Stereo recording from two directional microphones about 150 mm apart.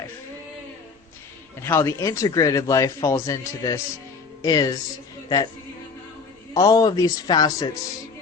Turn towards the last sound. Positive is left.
turn(degrees=30)  # may be behind; listen again after turning